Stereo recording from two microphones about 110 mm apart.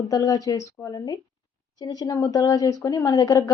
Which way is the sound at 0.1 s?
35° left (ahead or behind).